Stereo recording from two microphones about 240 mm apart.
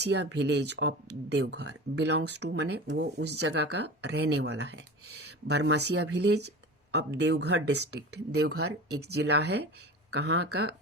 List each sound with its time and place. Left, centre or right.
0.0 s speech: right